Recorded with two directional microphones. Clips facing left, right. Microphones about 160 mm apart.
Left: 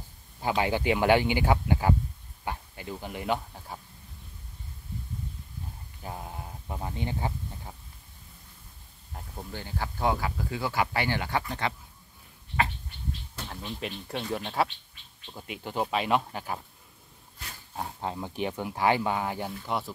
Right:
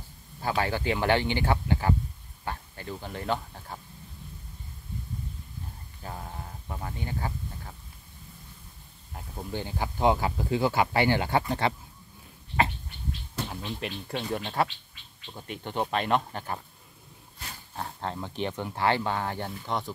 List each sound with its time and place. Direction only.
0.4 s speech: 15° left (ahead or behind)
6.0 s speech: 15° left (ahead or behind)
9.1 s a sound: 5° right (ahead or behind)
9.5 s speech: 20° right (ahead or behind)
13.6 s speech: centre (ahead or behind)
17.7 s speech: 10° left (ahead or behind)